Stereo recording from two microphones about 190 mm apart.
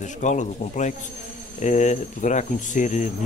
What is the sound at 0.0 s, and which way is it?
Speech, 40° left (ahead or behind).